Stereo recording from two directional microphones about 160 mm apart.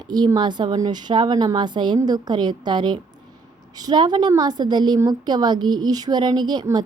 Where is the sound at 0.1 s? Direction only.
25° right (ahead or behind).